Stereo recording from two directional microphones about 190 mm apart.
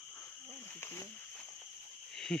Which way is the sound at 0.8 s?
10° left (ahead or behind).